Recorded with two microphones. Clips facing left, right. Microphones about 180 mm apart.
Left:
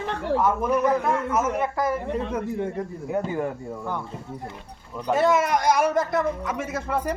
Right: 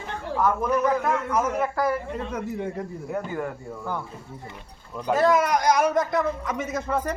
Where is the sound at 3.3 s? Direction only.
15° left (ahead or behind).